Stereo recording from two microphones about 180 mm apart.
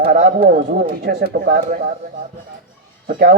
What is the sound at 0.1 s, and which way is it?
Speech, 50° right (ahead or behind).